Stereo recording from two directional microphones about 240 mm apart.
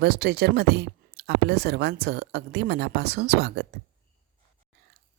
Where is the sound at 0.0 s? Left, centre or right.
Right.